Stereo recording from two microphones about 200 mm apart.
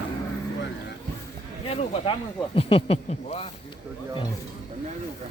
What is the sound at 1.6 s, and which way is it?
Speech, 30° left (ahead or behind).